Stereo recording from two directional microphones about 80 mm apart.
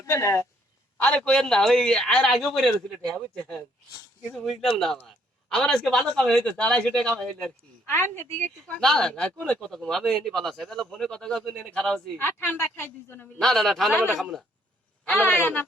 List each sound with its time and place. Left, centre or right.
0.0 s speech: left
0.9 s a man's voice: centre
4.4 s a man's voice: centre
7.9 s a woman's voice: left
8.8 s speech: centre
12.1 s a woman's voice: left
13.4 s speech: centre
15.2 s a woman's voice: left